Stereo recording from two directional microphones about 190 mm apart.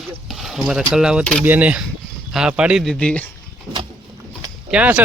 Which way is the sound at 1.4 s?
10° right (ahead or behind).